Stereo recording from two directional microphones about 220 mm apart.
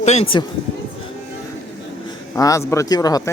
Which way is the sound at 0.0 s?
30° left (ahead or behind).